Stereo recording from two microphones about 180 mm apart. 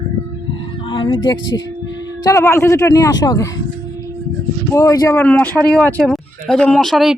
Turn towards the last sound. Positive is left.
turn(degrees=0)  # may be behind; listen again after turning